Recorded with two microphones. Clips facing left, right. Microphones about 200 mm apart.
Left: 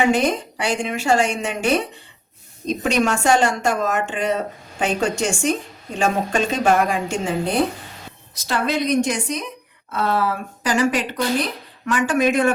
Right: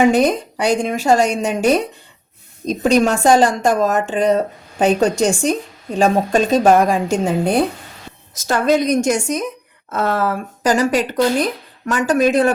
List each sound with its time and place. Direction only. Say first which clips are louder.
0.1 s a woman's voice: right 4 dB; 40° right (ahead or behind)
8.4 s speech: right 6 dB; 45° right (ahead or behind)